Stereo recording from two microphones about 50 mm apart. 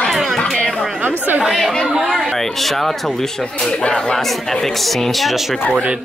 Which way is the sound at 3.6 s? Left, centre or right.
Centre.